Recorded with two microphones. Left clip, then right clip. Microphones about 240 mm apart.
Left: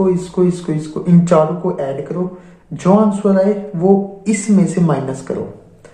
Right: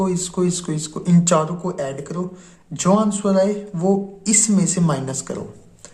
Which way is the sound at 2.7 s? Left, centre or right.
Right.